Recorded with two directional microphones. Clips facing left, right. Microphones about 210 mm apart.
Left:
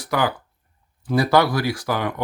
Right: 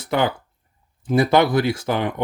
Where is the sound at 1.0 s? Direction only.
20° right (ahead or behind).